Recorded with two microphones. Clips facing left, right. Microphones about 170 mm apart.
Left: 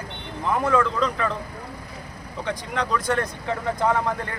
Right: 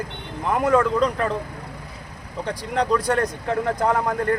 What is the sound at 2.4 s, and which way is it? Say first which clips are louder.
Speech: right 4 dB; 35° right (ahead or behind).